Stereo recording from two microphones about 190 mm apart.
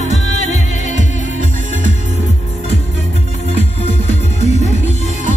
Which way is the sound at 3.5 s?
35° left (ahead or behind).